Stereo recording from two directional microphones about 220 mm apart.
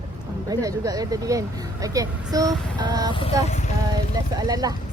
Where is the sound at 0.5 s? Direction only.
15° right (ahead or behind).